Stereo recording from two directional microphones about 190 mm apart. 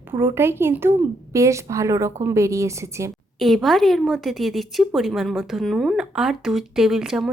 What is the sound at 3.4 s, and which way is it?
Speech, centre (ahead or behind).